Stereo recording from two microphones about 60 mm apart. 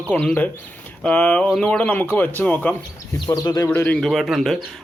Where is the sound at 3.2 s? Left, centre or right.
Left.